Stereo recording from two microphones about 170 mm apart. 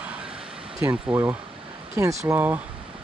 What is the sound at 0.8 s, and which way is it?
Speech, 10° right (ahead or behind).